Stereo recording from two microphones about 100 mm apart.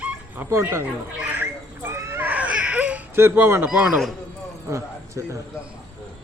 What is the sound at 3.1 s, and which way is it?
Speech, 25° right (ahead or behind).